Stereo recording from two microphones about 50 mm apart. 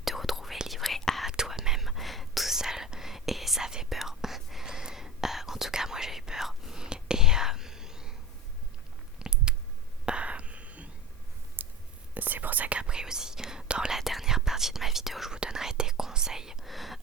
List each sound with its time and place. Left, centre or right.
0.0 s whispering: centre
1.3 s whispering: centre
4.6 s whispering: centre
9.1 s a sound: centre
10.1 s whispering: right
11.6 s a sound: right
12.1 s whispering: right
12.8 s whispering: centre
13.9 s whispering: centre
16.6 s whispering: centre